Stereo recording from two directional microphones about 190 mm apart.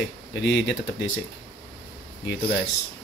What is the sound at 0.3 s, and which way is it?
Speech, 65° left (ahead or behind).